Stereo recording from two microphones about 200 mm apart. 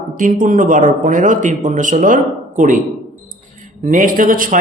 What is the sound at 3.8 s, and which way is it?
Speech, 40° right (ahead or behind).